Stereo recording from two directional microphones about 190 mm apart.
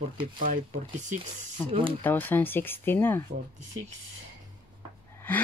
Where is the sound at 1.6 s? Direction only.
25° right (ahead or behind).